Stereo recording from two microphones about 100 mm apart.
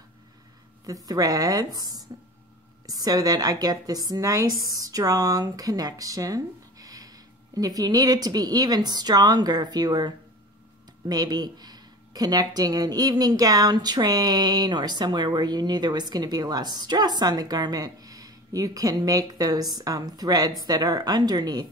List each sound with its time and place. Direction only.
1.0 s speech: 35° right (ahead or behind)